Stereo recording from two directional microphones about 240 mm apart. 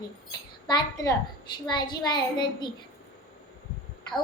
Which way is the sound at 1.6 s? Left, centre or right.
Centre.